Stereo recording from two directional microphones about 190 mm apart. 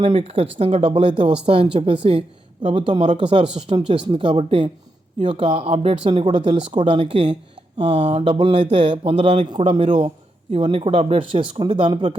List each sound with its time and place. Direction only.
0.0 s speech: 30° right (ahead or behind)